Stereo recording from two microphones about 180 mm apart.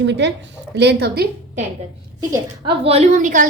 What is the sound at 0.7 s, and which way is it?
Speech, 65° right (ahead or behind).